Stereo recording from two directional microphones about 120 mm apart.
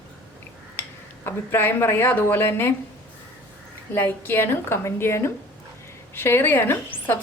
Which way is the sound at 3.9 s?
20° left (ahead or behind).